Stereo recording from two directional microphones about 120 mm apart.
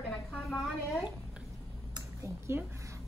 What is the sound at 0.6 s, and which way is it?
Speech, centre (ahead or behind).